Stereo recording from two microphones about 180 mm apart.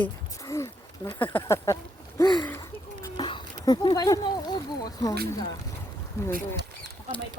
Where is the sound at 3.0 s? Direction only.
25° left (ahead or behind).